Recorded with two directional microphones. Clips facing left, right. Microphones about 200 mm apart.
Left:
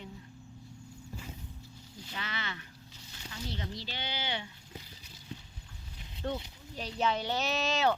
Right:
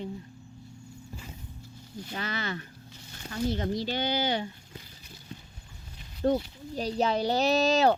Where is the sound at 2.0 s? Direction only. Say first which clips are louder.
Right 7 dB; 45° right (ahead or behind).